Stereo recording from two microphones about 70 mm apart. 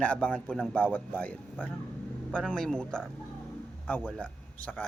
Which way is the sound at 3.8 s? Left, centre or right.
Left.